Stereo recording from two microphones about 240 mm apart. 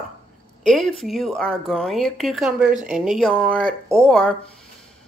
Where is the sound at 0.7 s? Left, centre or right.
Centre.